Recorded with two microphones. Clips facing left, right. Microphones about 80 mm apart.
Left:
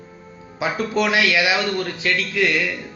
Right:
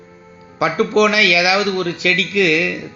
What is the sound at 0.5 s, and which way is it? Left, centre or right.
A man's voice, right.